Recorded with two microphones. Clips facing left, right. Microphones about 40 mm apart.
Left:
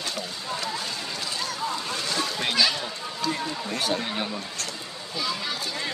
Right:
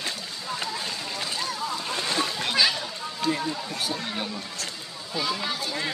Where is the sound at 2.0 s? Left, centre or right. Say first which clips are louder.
Right 4 dB; right.